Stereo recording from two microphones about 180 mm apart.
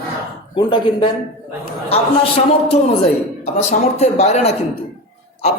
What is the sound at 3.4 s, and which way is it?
A woman's voice, 35° left (ahead or behind).